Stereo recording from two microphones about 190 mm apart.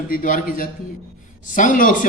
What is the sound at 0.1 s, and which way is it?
Speech, 45° left (ahead or behind).